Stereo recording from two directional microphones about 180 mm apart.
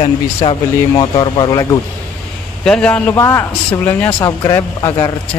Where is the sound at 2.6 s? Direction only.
5° left (ahead or behind).